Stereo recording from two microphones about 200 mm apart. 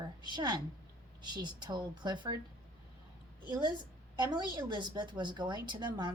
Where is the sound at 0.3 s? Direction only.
20° right (ahead or behind).